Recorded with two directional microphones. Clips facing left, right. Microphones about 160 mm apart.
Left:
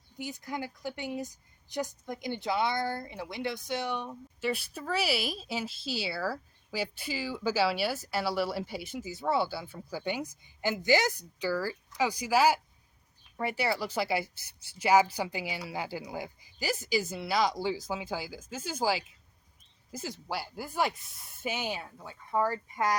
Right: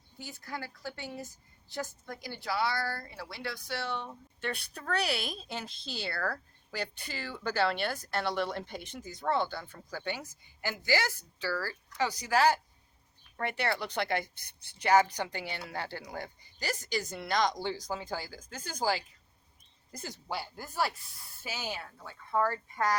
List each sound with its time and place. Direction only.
0.2 s a woman's voice: 15° left (ahead or behind)